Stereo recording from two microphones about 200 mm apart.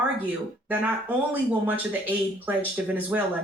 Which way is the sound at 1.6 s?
10° right (ahead or behind).